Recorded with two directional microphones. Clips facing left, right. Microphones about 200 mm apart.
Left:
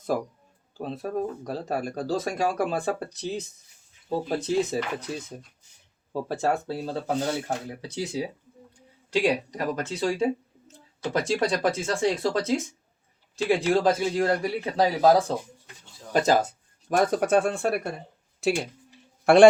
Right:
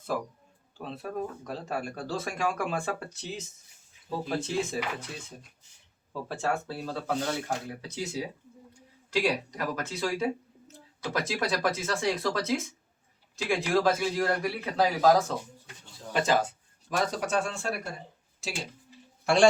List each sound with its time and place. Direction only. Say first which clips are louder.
0.8 s speech: left 5 dB; 40° left (ahead or behind)
6.2 s speech: left 4 dB; 40° left (ahead or behind)
6.7 s speech: left 4 dB; 25° left (ahead or behind)
9.1 s speech: left 4 dB; 30° left (ahead or behind)
16.1 s speech: left 4 dB; 40° left (ahead or behind)
16.9 s a man's voice: left 7 dB; 55° left (ahead or behind)